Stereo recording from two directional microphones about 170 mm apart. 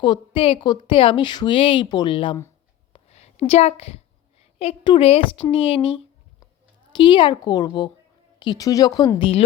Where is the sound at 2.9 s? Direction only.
40° left (ahead or behind).